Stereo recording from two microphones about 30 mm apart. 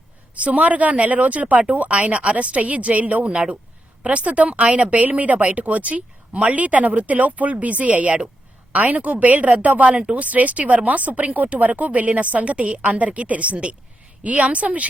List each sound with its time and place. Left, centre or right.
0.4 s speech: right
4.0 s speech: right
5.0 s speech: right
9.9 s speech: right
10.2 s speech: right
12.8 s speech: right